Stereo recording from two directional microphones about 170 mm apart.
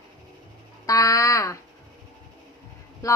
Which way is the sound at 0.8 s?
20° left (ahead or behind).